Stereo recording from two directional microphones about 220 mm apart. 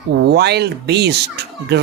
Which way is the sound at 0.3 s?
50° right (ahead or behind).